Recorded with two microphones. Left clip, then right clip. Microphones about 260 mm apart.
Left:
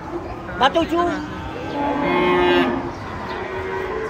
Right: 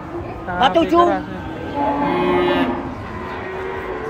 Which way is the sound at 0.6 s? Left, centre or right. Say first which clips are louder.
Right 2 dB; centre.